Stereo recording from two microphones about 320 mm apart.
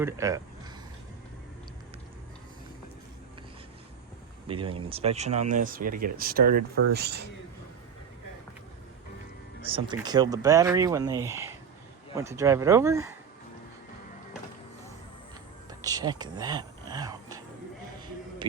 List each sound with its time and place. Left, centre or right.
0.0 s speech: centre
4.4 s speech: centre
9.6 s speech: centre
15.8 s a sound: centre